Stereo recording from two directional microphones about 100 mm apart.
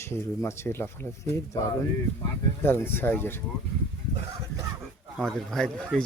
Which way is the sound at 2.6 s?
25° left (ahead or behind).